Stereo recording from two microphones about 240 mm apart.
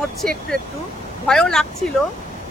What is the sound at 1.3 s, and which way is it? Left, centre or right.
Speech, centre.